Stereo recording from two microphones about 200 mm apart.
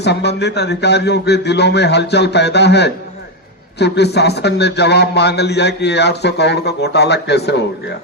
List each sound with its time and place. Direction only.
0.0 s a man's voice: 55° left (ahead or behind)